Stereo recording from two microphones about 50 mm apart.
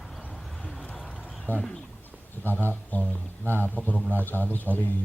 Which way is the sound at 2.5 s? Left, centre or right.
Left.